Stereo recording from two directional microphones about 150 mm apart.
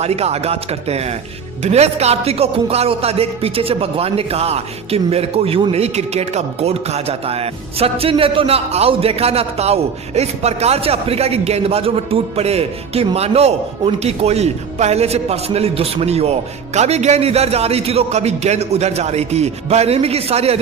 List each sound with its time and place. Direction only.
0.0 s speech: 45° right (ahead or behind)